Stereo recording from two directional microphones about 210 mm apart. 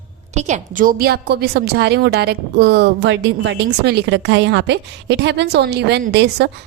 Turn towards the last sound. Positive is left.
turn(degrees=-50)  # may be behind; listen again after turning